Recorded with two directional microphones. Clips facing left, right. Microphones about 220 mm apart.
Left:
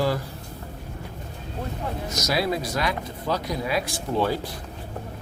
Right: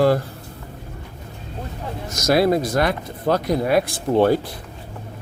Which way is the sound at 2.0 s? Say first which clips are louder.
Right 9 dB; 50° right (ahead or behind).